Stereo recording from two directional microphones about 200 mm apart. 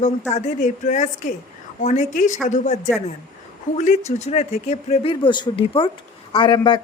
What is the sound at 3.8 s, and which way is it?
Speech, 35° left (ahead or behind).